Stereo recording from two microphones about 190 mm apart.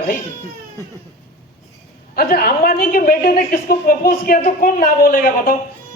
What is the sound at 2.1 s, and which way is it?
A woman's voice, 50° left (ahead or behind).